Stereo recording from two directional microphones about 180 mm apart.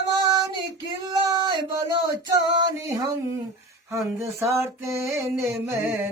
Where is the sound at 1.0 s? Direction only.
25° right (ahead or behind).